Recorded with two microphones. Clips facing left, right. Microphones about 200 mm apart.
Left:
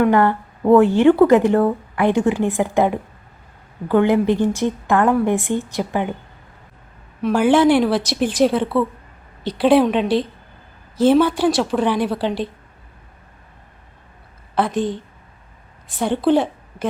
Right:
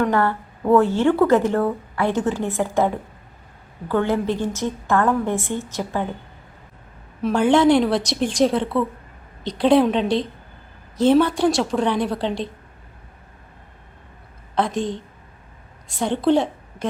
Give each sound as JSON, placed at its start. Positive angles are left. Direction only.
{"t": 0.0, "sound": "a woman's voice", "side_deg": 15}
{"t": 7.2, "sound": "a woman's voice", "side_deg": 5}
{"t": 14.5, "sound": "a woman's voice", "side_deg": 5}